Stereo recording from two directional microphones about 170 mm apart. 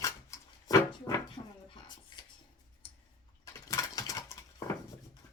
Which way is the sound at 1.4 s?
35° left (ahead or behind).